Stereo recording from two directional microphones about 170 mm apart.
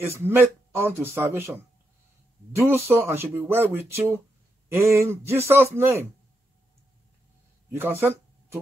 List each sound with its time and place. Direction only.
0.0 s speech: 15° right (ahead or behind)
2.5 s speech: 15° right (ahead or behind)
8.0 s a sound: 15° right (ahead or behind)